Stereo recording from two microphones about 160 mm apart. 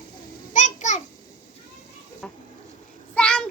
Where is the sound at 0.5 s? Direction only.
50° left (ahead or behind).